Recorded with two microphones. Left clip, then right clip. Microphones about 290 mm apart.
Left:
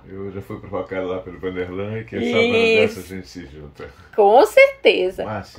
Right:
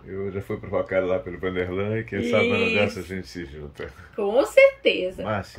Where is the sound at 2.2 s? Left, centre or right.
Centre.